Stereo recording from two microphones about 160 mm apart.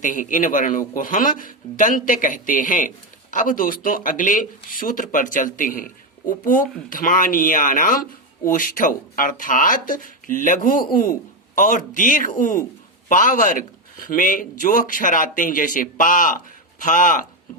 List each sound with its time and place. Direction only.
0.0 s speech: 55° left (ahead or behind)